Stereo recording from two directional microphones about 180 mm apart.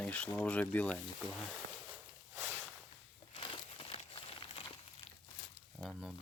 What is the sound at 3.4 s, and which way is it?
Crumpling, 30° left (ahead or behind).